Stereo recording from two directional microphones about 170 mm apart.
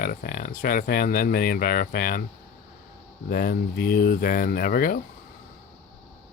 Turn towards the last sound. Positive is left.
turn(degrees=60)  # may be behind; listen again after turning